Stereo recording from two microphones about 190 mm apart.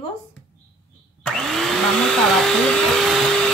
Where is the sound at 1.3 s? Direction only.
Centre (ahead or behind).